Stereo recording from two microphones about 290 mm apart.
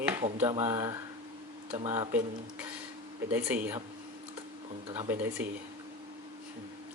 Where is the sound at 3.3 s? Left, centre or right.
Centre.